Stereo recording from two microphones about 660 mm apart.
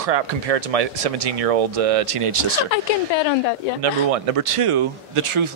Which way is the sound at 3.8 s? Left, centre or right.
Right.